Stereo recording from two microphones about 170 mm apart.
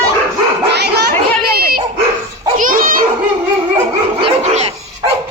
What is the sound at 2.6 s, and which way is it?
Dog, 50° right (ahead or behind).